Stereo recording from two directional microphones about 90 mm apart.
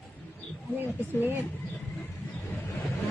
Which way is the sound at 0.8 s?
25° right (ahead or behind).